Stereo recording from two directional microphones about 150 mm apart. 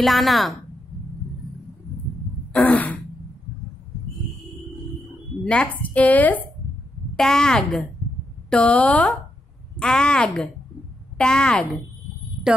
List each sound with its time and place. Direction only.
0.0 s speech: centre (ahead or behind)
2.5 s throat clearing: 10° left (ahead or behind)
5.4 s a woman's voice: 5° left (ahead or behind)